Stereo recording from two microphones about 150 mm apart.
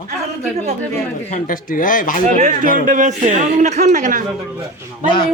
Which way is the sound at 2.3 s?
60° right (ahead or behind).